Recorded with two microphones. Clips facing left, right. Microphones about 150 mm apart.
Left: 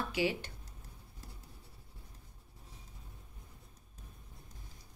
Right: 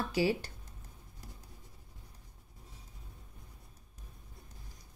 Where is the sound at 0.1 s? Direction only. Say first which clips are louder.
Right 4 dB; 35° right (ahead or behind).